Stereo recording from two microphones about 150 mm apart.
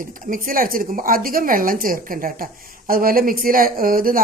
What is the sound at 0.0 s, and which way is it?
A woman's voice, 65° right (ahead or behind).